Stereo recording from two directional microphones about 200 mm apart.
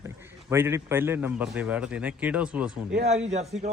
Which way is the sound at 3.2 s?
35° right (ahead or behind).